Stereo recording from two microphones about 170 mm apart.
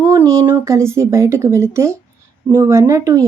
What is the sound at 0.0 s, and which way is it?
Speech, 15° right (ahead or behind).